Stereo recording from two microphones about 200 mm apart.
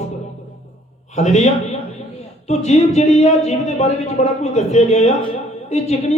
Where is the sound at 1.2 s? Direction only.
35° left (ahead or behind).